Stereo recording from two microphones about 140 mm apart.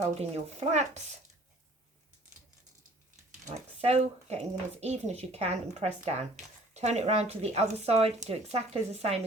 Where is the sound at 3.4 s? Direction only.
50° right (ahead or behind).